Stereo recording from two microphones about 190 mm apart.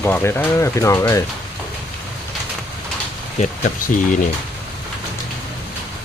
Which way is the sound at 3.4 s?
40° left (ahead or behind).